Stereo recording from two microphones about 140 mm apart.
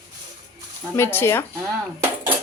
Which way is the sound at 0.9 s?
15° left (ahead or behind).